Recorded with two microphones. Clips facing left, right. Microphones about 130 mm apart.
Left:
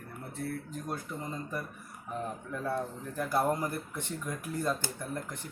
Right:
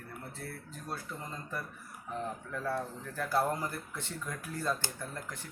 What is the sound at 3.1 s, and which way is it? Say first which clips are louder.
Speech: left 2 dB; 15° left (ahead or behind).